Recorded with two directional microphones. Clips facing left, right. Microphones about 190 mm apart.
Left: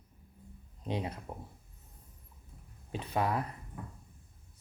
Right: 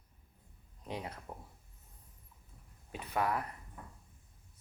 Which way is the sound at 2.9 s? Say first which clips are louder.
Left 2 dB; 25° left (ahead or behind).